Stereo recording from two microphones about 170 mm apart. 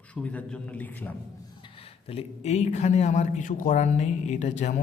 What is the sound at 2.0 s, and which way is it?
Speech, 35° left (ahead or behind).